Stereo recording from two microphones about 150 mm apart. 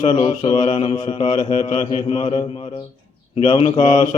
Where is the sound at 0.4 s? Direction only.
45° left (ahead or behind).